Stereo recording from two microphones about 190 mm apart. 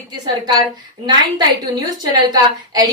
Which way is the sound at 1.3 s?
20° right (ahead or behind).